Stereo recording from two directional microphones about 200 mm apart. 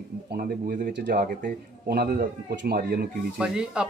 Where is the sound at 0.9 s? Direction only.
55° right (ahead or behind).